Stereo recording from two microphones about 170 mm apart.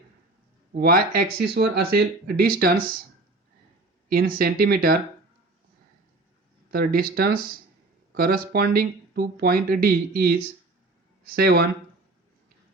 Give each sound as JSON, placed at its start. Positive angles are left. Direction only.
{"t": 0.7, "sound": "speech", "side_deg": -65}
{"t": 4.1, "sound": "speech", "side_deg": -60}
{"t": 6.7, "sound": "speech", "side_deg": -60}